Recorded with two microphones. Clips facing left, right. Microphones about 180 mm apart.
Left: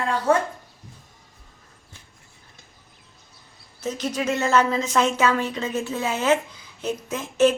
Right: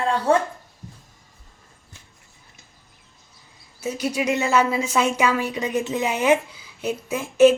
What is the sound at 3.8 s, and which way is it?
A woman's voice, 10° right (ahead or behind).